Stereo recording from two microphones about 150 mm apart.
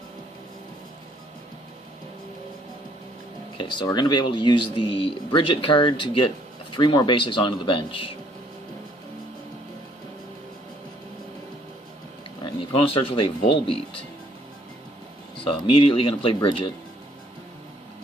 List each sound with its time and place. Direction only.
3.6 s speech: 30° left (ahead or behind)
12.5 s speech: 35° left (ahead or behind)
15.6 s speech: 35° left (ahead or behind)